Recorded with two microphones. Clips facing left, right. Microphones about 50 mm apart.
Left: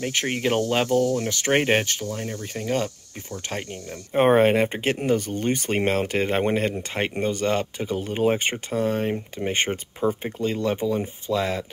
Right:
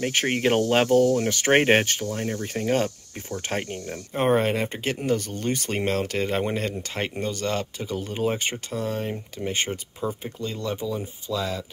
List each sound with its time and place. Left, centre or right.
0.0 s speech: centre
1.3 s speech: right
4.1 s speech: left